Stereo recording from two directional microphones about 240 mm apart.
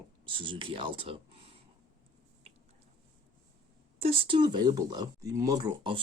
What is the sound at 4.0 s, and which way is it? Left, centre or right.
Speech, right.